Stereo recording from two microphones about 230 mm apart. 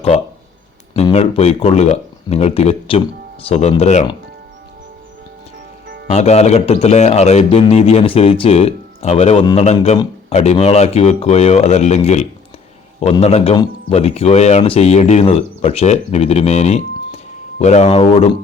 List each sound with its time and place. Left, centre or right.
0.9 s speech: left
6.1 s speech: left